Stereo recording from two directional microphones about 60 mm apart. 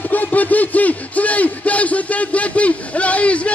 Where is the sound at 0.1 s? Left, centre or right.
Left.